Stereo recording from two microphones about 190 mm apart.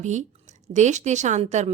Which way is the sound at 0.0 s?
40° right (ahead or behind).